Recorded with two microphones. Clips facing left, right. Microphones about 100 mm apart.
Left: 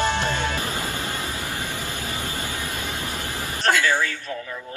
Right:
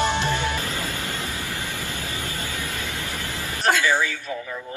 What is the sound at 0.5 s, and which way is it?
Vehicle, 20° left (ahead or behind).